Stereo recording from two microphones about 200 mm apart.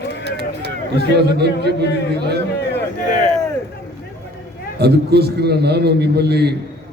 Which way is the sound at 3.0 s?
40° left (ahead or behind).